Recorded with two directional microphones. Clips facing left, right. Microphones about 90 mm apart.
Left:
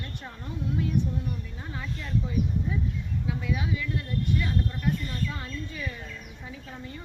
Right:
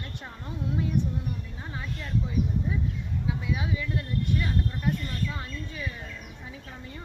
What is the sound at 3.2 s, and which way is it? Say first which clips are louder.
Speech: even; 20° right (ahead or behind).